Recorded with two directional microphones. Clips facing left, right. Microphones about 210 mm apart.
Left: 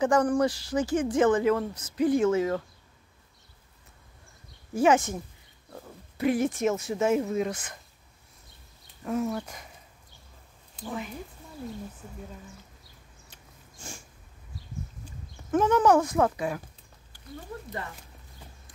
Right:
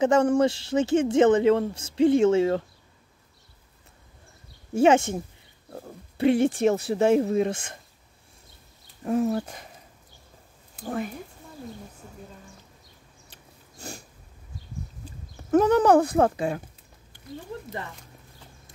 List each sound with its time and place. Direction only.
0.0 s speech: 25° right (ahead or behind)
4.7 s speech: 25° right (ahead or behind)
9.0 s speech: 30° right (ahead or behind)
13.3 s a sound: 35° right (ahead or behind)
15.0 s speech: 35° right (ahead or behind)